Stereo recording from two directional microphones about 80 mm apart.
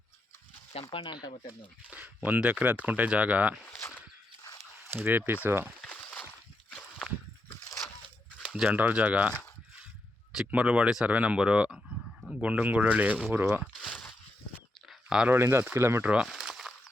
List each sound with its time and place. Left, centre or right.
0.9 s speech: left
1.9 s speech: centre
4.9 s speech: right
5.8 s a sound: centre
8.4 s speech: centre
10.4 s speech: centre
13.5 s a sound: centre
15.3 s speech: right
16.2 s a sound: centre